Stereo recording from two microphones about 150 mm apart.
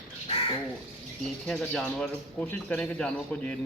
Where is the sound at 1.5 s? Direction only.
5° left (ahead or behind).